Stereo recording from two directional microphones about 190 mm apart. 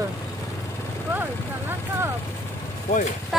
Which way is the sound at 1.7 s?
15° right (ahead or behind).